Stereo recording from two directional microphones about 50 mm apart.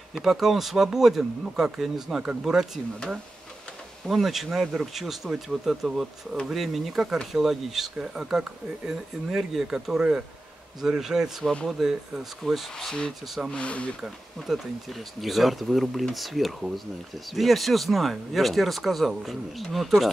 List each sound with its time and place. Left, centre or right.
0.1 s speech: centre
4.1 s speech: centre
9.9 s speech: centre
10.8 s speech: centre
12.7 s speech: centre
13.5 s speech: left
14.4 s speech: centre